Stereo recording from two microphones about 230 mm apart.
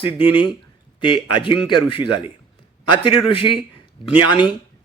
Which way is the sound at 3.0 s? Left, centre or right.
Left.